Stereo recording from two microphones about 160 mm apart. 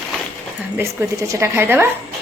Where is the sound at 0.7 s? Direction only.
15° right (ahead or behind).